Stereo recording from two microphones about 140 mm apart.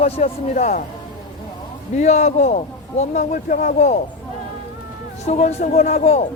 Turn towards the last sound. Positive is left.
turn(degrees=50)  # may be behind; listen again after turning